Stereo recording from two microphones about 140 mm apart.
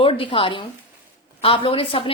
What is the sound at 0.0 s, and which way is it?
A woman's voice, 40° left (ahead or behind).